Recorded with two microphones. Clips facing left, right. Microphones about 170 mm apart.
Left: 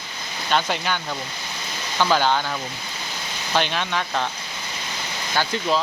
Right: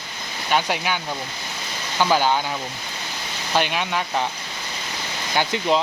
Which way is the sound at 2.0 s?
10° right (ahead or behind).